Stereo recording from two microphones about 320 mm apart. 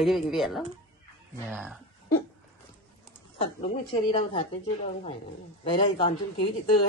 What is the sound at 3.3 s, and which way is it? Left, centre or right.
A woman's voice, centre.